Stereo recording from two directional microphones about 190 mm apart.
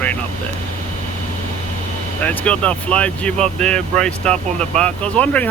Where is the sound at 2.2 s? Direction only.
5° left (ahead or behind).